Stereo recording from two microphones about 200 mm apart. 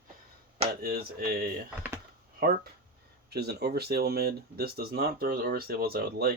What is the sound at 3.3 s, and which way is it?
Speech, 55° right (ahead or behind).